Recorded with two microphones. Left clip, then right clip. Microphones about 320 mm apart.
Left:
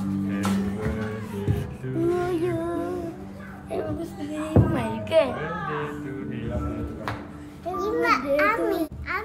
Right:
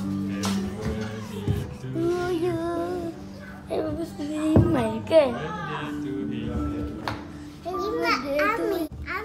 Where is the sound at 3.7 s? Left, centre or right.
Right.